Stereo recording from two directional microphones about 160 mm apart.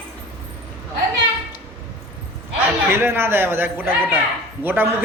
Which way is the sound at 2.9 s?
15° right (ahead or behind).